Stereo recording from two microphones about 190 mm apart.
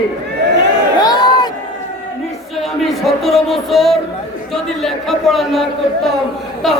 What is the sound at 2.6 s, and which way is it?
Speech, centre (ahead or behind).